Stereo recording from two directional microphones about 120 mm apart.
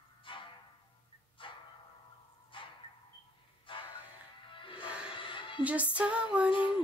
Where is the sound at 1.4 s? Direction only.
45° left (ahead or behind).